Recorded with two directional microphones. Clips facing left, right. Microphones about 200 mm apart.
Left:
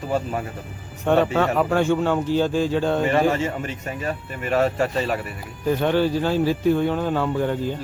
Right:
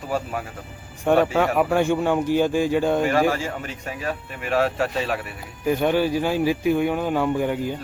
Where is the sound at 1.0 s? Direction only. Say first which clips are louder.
Even; 10° right (ahead or behind).